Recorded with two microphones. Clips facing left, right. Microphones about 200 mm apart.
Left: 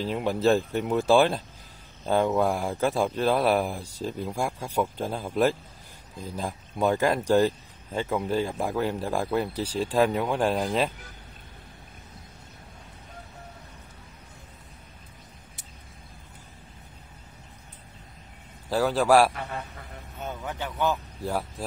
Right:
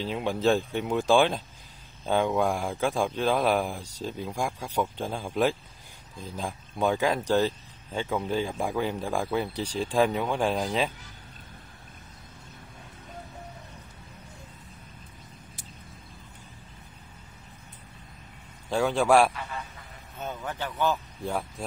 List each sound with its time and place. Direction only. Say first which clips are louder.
0.1 s speech: left 2 dB; 5° left (ahead or behind)
18.7 s a man's voice: left 1 dB; 5° left (ahead or behind)
19.3 s a man's voice: left 2 dB; 60° left (ahead or behind)
20.2 s speech: even; 15° left (ahead or behind)
21.2 s a man's voice: left 1 dB; centre (ahead or behind)